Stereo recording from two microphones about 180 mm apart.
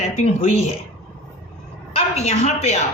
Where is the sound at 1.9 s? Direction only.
35° left (ahead or behind).